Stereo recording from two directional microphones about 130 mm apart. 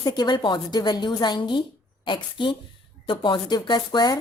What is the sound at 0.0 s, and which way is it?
Speech, 35° left (ahead or behind).